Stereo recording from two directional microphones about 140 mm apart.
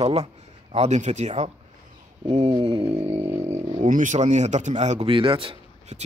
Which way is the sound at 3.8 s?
65° right (ahead or behind).